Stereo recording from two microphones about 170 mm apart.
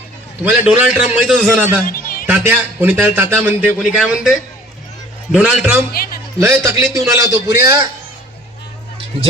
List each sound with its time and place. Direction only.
0.4 s a man's voice: 10° right (ahead or behind)
1.8 s music: 55° left (ahead or behind)
2.2 s a man's voice: 10° right (ahead or behind)
5.9 s speech: 60° left (ahead or behind)
6.4 s a man's voice: 15° right (ahead or behind)